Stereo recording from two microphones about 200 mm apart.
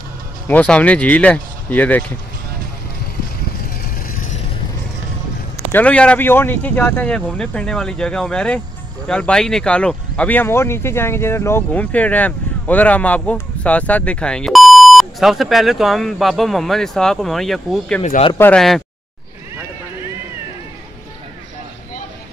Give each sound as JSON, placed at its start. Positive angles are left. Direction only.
{"t": 0.5, "sound": "speech", "side_deg": 5}
{"t": 3.8, "sound": "music", "side_deg": 40}
{"t": 5.7, "sound": "speech", "side_deg": 5}
{"t": 18.0, "sound": "speech", "side_deg": 35}
{"t": 18.4, "sound": "speech", "side_deg": 5}